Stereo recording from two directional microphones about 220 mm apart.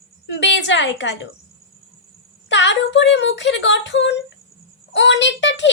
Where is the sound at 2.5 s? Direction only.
55° left (ahead or behind).